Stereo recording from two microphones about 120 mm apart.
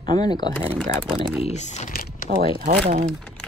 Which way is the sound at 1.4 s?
70° left (ahead or behind).